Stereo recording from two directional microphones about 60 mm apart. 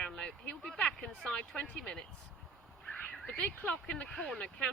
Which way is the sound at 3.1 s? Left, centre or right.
Centre.